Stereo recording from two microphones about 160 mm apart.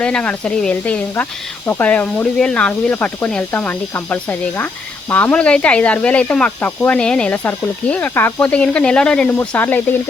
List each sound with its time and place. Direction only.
0.0 s speech: 5° left (ahead or behind)